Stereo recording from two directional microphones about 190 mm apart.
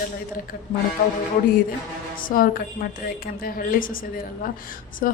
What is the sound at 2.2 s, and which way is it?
A woman's voice, 45° left (ahead or behind).